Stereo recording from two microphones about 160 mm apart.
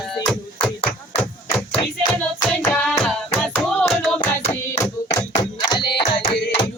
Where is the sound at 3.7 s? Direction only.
5° left (ahead or behind).